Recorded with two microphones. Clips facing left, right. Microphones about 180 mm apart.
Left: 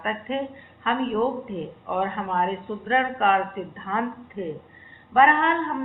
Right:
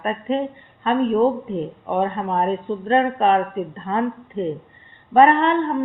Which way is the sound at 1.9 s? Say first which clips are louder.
Right 4 dB; 35° right (ahead or behind).